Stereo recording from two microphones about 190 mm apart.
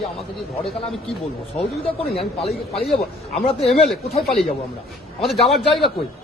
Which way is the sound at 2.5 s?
Centre (ahead or behind).